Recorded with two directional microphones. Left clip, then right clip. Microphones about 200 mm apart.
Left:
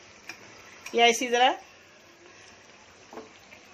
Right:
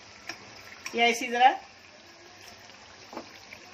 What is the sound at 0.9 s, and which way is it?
Speech, 45° left (ahead or behind).